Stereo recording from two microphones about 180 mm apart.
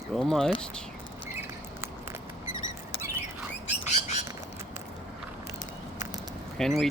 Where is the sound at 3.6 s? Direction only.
40° left (ahead or behind).